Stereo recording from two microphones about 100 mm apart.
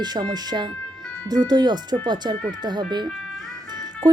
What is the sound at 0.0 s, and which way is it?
A woman's voice, 45° right (ahead or behind).